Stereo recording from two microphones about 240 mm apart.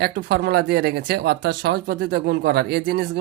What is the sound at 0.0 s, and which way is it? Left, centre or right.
Speech, right.